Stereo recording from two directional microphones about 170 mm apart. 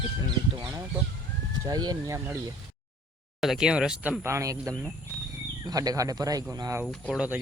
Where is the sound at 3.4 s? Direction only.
Centre (ahead or behind); by 6.8 s 20° right (ahead or behind).